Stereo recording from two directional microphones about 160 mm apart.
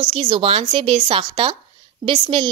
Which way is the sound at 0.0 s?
35° right (ahead or behind).